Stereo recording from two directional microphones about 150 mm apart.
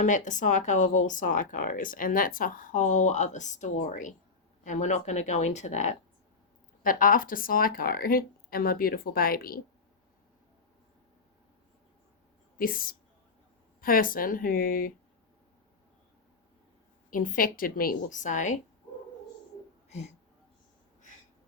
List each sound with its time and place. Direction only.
0.0 s speech: 55° left (ahead or behind)
6.8 s speech: 65° left (ahead or behind)
12.5 s speech: 75° left (ahead or behind)
17.1 s speech: 65° left (ahead or behind)